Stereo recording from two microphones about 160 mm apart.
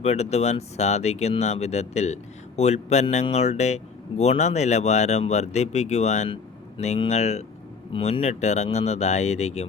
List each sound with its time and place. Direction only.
0.0 s speech: 45° left (ahead or behind)